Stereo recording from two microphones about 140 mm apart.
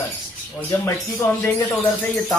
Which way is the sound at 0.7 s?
15° left (ahead or behind).